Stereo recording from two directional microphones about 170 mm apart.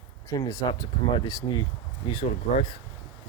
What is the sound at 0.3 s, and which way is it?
Speech, 20° left (ahead or behind).